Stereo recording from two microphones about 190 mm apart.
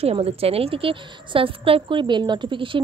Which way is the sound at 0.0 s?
30° right (ahead or behind).